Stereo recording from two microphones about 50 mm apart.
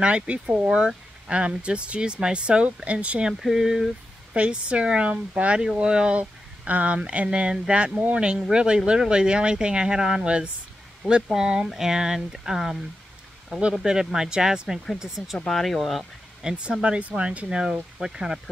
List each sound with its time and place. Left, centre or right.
0.0 s speech: right
3.3 s speech: centre
4.4 s speech: right
13.5 s speech: right
15.3 s speech: centre
16.4 s speech: right